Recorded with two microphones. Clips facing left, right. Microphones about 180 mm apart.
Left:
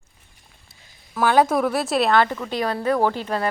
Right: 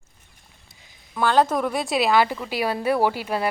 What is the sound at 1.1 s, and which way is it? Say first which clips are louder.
A woman's voice: left 2 dB; 10° left (ahead or behind).